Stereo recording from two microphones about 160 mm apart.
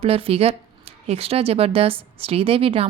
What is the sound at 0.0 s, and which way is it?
Speech, 35° right (ahead or behind).